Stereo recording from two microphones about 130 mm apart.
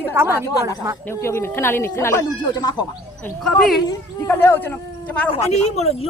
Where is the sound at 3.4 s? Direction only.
5° left (ahead or behind).